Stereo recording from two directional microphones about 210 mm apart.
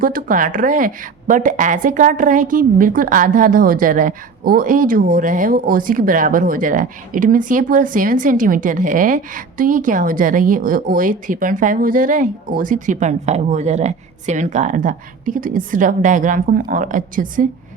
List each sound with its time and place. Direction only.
0.0 s a woman's voice: 40° right (ahead or behind)